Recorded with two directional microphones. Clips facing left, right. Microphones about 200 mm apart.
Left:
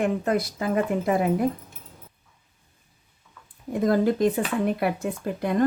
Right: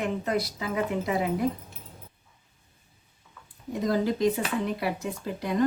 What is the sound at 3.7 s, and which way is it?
Speech, 55° left (ahead or behind).